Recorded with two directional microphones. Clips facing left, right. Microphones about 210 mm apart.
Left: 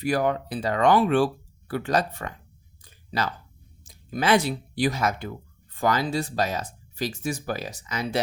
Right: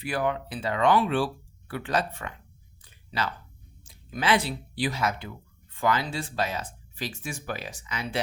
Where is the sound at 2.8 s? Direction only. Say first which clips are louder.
Left 3 dB; 40° left (ahead or behind).